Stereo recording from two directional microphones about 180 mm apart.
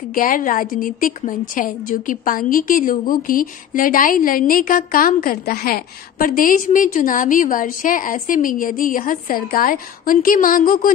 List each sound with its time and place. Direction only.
0.1 s a woman's voice: 50° left (ahead or behind)